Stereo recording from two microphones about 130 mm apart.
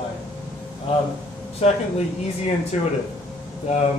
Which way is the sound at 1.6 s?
55° left (ahead or behind).